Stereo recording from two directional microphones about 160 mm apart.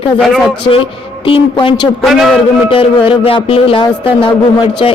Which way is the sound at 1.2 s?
30° left (ahead or behind).